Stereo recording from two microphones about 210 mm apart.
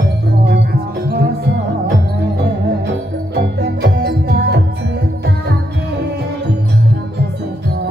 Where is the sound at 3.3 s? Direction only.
50° right (ahead or behind).